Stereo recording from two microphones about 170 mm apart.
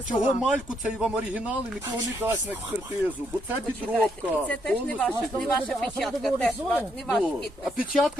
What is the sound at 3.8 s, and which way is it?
Speech, 5° left (ahead or behind).